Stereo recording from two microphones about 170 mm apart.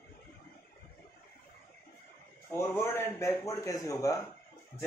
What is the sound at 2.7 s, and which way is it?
A man's voice, 15° left (ahead or behind).